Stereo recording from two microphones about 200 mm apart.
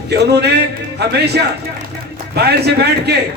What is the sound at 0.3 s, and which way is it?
A man's voice, 55° right (ahead or behind).